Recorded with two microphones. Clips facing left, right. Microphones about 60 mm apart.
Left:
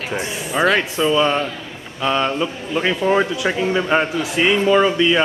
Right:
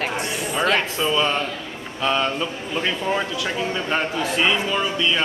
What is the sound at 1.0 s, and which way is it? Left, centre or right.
A man's voice, centre.